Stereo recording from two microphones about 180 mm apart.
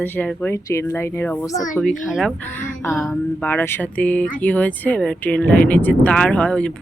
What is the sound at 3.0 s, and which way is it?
Speech, 10° left (ahead or behind).